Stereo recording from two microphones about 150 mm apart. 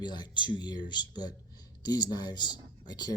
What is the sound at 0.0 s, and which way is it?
Speech, 30° left (ahead or behind).